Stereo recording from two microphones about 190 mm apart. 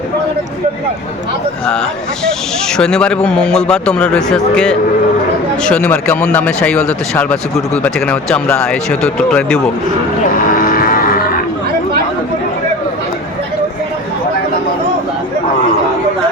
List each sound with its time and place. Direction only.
2.7 s a man's voice: 5° left (ahead or behind)
10.3 s vehicle: 45° left (ahead or behind)